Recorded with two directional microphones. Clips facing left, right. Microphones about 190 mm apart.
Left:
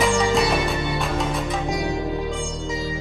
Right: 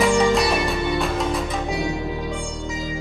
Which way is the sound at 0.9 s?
Centre (ahead or behind).